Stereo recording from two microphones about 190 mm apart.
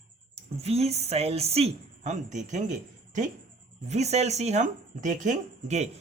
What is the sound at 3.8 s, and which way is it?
Speech, 35° right (ahead or behind).